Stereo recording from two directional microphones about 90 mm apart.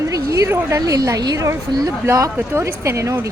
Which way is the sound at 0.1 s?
40° right (ahead or behind).